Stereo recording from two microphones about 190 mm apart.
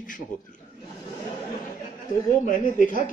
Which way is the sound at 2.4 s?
45° left (ahead or behind).